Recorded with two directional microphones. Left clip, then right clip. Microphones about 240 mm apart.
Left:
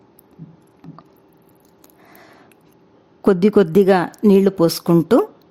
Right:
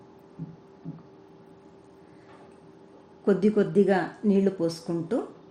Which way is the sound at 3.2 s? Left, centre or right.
Left.